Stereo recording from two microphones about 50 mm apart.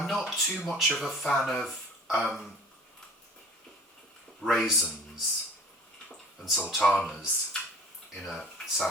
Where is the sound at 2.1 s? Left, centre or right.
Left.